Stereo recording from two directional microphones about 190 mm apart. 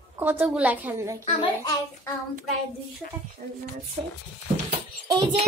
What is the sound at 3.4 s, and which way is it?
Speech, 40° right (ahead or behind).